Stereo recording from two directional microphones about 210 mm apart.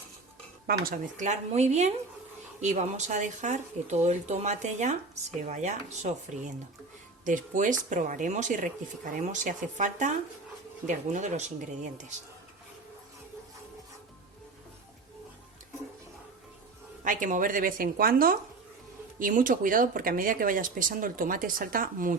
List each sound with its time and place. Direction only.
0.7 s speech: 40° right (ahead or behind)
17.0 s speech: 40° right (ahead or behind)